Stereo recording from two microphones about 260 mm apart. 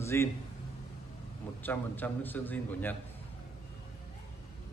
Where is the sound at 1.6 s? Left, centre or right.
Centre.